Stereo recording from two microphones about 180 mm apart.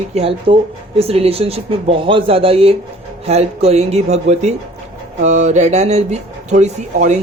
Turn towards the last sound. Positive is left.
turn(degrees=-40)  # may be behind; listen again after turning